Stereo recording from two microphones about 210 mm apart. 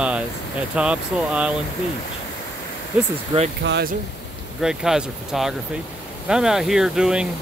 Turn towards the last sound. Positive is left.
turn(degrees=-5)  # may be behind; listen again after turning